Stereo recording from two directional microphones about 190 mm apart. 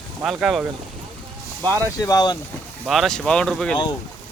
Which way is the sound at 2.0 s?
20° left (ahead or behind).